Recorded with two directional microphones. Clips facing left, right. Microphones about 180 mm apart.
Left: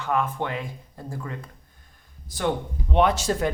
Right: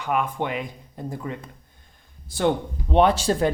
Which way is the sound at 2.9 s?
30° right (ahead or behind).